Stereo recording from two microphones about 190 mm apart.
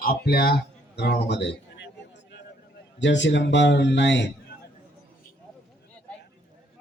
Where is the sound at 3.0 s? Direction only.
70° left (ahead or behind).